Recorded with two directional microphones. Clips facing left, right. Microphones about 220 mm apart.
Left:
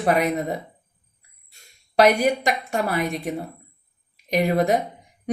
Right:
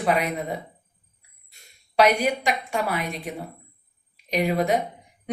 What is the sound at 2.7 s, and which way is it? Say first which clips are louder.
A woman's voice: left 3 dB; 45° left (ahead or behind).